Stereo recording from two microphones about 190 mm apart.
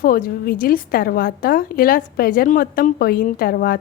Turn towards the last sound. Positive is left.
turn(degrees=50)  # may be behind; listen again after turning